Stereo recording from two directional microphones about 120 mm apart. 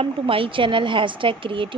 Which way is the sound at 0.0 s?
50° right (ahead or behind).